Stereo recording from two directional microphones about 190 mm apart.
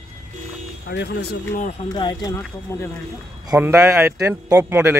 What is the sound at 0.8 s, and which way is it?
Speech, 60° left (ahead or behind).